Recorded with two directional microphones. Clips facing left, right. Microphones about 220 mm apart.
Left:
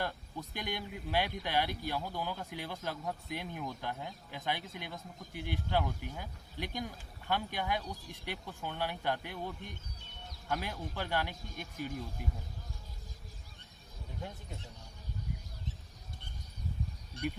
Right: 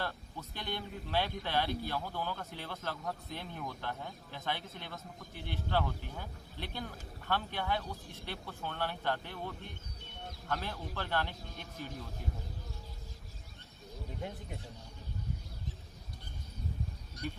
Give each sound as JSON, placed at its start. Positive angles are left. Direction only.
{"t": 0.0, "sound": "speech", "side_deg": 15}
{"t": 17.2, "sound": "speech", "side_deg": 30}